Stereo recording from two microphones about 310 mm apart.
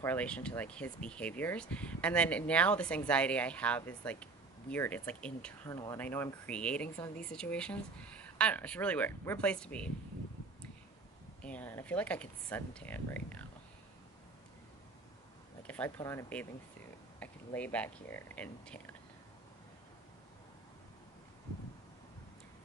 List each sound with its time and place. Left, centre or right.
0.0 s speech: centre
11.4 s speech: centre
15.6 s speech: centre